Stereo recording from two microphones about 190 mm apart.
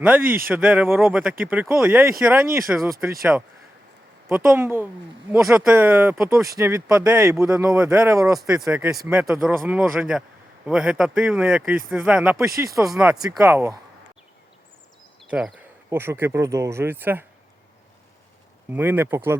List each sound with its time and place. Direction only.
0.0 s speech: 10° right (ahead or behind)
5.7 s speech: 10° right (ahead or behind)
7.7 s speech: 5° right (ahead or behind)
13.1 s speech: 20° right (ahead or behind)
15.2 s speech: 5° right (ahead or behind)
18.7 s speech: 10° right (ahead or behind)